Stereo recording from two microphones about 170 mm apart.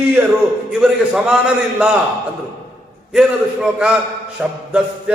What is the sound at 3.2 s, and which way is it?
Mantra, 5° right (ahead or behind).